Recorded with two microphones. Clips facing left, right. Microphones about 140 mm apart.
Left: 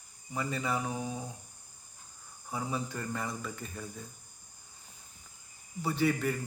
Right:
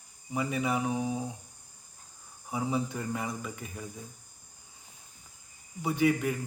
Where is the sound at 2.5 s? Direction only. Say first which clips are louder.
Right 4 dB; 20° right (ahead or behind).